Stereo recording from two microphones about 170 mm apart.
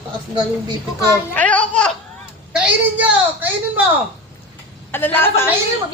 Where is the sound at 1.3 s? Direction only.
10° left (ahead or behind).